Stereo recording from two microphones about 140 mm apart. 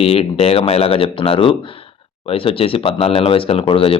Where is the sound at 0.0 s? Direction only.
45° left (ahead or behind).